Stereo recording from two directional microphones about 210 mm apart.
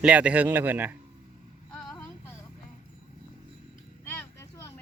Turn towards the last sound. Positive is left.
turn(degrees=10)  # may be behind; listen again after turning